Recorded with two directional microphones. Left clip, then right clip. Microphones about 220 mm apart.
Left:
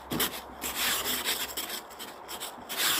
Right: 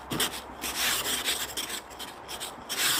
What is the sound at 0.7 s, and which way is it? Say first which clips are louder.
Rub: right 1 dB; centre (ahead or behind).